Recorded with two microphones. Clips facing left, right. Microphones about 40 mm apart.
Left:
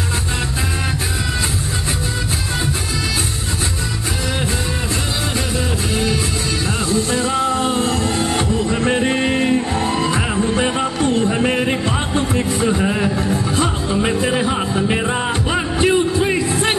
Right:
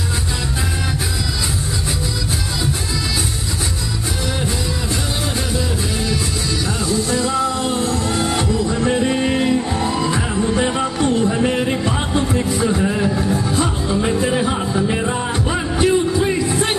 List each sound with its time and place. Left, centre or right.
6.9 s music: left
11.9 s music: left
16.2 s a sound: left